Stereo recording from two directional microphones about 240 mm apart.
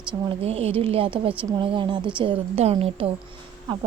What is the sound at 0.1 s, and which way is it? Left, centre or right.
Speech, right.